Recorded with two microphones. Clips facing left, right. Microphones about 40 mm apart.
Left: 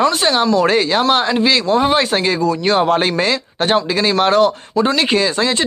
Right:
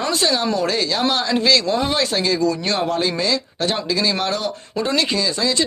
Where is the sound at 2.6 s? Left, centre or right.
Left.